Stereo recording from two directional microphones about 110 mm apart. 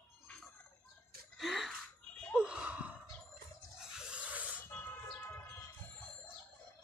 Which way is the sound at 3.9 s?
10° right (ahead or behind).